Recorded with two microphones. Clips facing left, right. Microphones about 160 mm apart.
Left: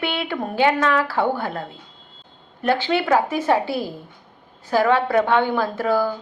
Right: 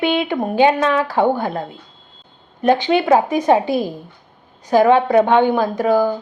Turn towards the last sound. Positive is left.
turn(degrees=-15)  # may be behind; listen again after turning